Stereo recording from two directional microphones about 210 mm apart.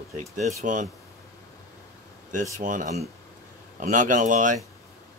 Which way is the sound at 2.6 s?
35° right (ahead or behind).